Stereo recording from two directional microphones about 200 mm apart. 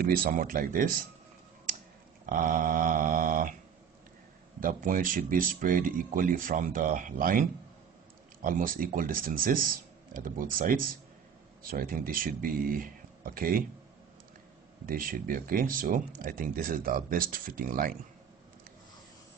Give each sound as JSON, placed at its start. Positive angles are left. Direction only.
{"t": 0.0, "sound": "speech", "side_deg": -45}
{"t": 1.7, "sound": "a sound", "side_deg": -40}
{"t": 2.2, "sound": "speech", "side_deg": -45}
{"t": 4.6, "sound": "speech", "side_deg": -45}
{"t": 8.5, "sound": "speech", "side_deg": -45}
{"t": 14.9, "sound": "speech", "side_deg": -45}